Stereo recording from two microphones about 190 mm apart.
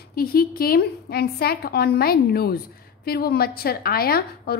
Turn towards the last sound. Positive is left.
turn(degrees=55)  # may be behind; listen again after turning